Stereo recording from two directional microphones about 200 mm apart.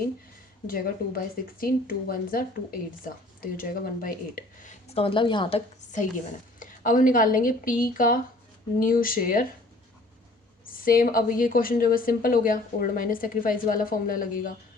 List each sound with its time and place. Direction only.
0.7 s speech: 45° left (ahead or behind)
10.8 s speech: 45° left (ahead or behind)